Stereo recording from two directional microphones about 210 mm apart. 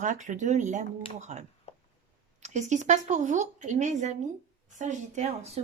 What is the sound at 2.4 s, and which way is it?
Speech, 35° right (ahead or behind).